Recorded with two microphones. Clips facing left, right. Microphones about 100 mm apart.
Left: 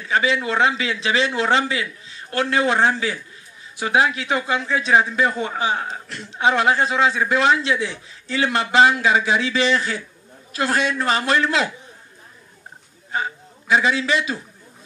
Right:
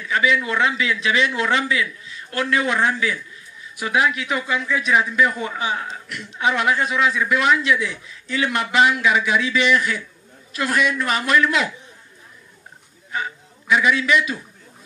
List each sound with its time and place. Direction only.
0.0 s a man's voice: 30° left (ahead or behind)
13.1 s a man's voice: 30° left (ahead or behind)